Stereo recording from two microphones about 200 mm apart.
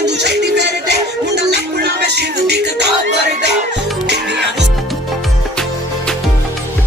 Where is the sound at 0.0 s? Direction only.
55° right (ahead or behind).